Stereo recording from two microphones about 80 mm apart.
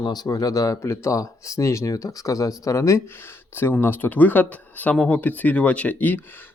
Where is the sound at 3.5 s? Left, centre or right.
Left.